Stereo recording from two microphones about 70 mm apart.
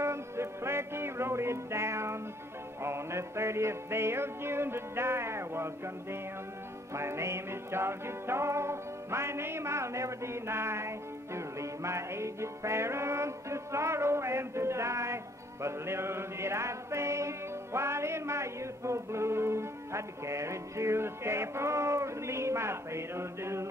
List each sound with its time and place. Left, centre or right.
0.0 s music: right
6.9 s music: right